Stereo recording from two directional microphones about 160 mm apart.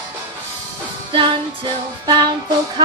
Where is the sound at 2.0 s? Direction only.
25° right (ahead or behind).